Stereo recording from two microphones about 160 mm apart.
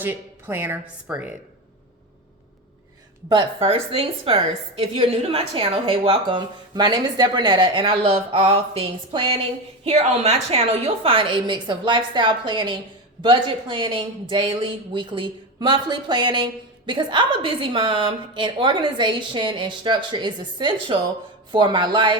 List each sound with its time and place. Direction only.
0.0 s a woman's voice: 15° right (ahead or behind)
3.2 s a woman's voice: 30° right (ahead or behind)